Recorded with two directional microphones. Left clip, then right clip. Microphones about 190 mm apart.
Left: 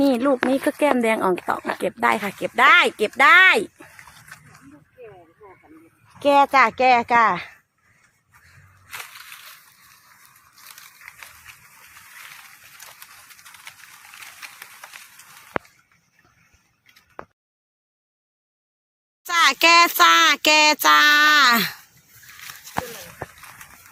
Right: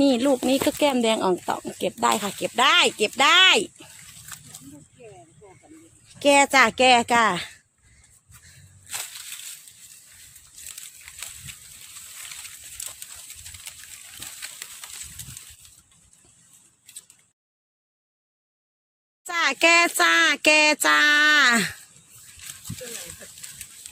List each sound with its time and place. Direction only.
0.0 s speech: 10° right (ahead or behind)
6.1 s speech: 25° right (ahead or behind)
6.4 s speech: 40° right (ahead or behind)
19.2 s speech: 10° right (ahead or behind)